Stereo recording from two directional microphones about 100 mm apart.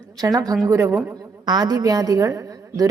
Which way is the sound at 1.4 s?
45° right (ahead or behind).